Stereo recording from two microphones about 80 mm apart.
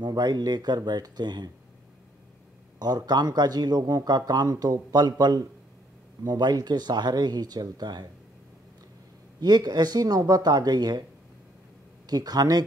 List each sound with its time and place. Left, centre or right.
0.0 s speech: right
2.8 s speech: right
9.4 s speech: right
12.1 s speech: right